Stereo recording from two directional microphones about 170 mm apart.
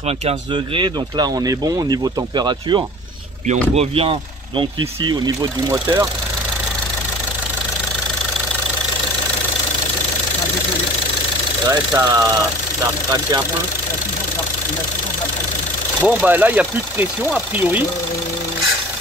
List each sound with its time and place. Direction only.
0.3 s speech: 25° right (ahead or behind)
5.1 s speech: 20° right (ahead or behind)
11.7 s speech: 25° right (ahead or behind)
16.0 s speech: 10° right (ahead or behind)